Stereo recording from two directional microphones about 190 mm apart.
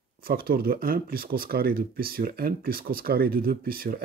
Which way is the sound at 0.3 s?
50° right (ahead or behind).